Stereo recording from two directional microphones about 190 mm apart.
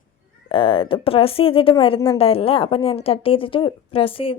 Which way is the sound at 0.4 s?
25° left (ahead or behind).